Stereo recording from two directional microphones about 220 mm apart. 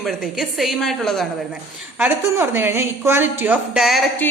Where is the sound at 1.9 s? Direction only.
10° right (ahead or behind).